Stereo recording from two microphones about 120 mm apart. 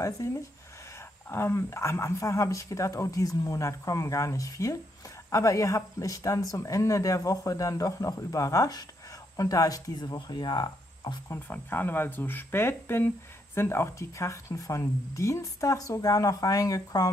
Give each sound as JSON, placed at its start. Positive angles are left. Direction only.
{"t": 0.0, "sound": "speech", "side_deg": 25}
{"t": 11.2, "sound": "speech", "side_deg": 15}